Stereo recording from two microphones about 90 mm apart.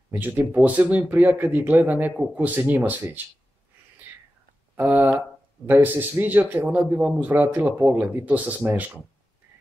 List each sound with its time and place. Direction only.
0.1 s speech: 20° right (ahead or behind)
4.1 s whispering: 20° right (ahead or behind)
4.7 s speech: 20° right (ahead or behind)